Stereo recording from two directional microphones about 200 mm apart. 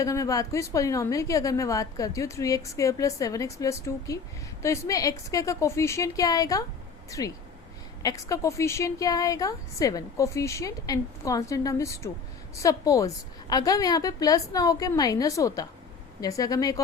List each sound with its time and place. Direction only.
0.0 s a woman's voice: 15° left (ahead or behind)